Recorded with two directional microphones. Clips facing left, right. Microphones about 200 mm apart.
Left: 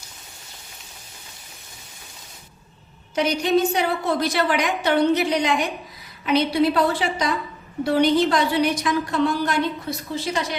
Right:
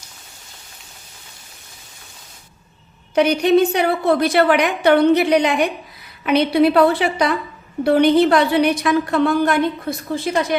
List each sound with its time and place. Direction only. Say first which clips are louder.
3.2 s a woman's voice: right 6 dB; 60° right (ahead or behind)